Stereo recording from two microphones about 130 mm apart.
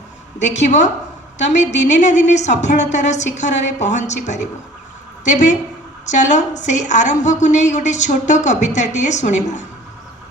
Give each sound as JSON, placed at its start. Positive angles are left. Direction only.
{"t": 0.3, "sound": "a woman's voice", "side_deg": 65}